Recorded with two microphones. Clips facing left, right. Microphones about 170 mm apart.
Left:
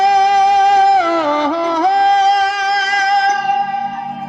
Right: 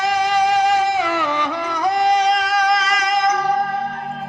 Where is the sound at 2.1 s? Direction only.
30° left (ahead or behind).